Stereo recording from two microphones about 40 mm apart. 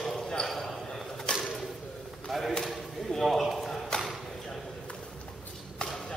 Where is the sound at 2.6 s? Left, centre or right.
Centre.